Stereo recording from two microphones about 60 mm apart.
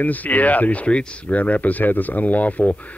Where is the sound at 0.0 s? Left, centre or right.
Left.